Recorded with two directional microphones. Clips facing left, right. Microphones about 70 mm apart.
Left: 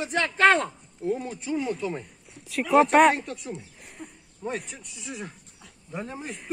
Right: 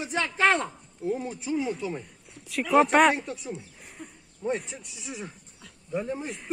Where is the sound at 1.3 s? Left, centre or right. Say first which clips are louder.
Even; centre.